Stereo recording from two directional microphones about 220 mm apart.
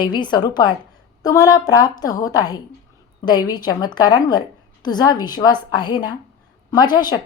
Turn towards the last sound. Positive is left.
turn(degrees=20)  # may be behind; listen again after turning